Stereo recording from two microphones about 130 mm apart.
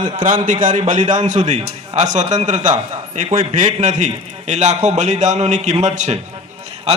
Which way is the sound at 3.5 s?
75° right (ahead or behind).